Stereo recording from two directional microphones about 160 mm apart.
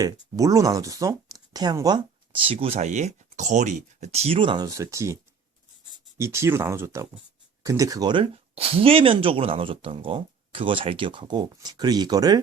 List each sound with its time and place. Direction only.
0.0 s speech: 20° right (ahead or behind)
6.1 s speech: 15° right (ahead or behind)